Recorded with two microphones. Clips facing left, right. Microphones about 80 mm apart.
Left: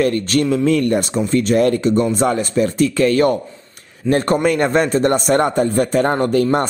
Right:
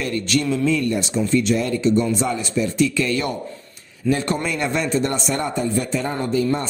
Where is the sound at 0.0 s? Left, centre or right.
Left.